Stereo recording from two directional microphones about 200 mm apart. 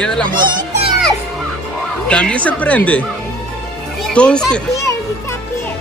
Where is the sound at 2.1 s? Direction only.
5° left (ahead or behind).